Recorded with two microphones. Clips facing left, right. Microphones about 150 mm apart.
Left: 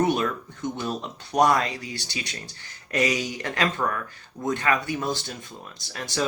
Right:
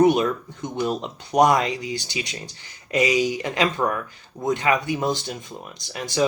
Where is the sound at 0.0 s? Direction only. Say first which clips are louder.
Right 6 dB; 15° right (ahead or behind).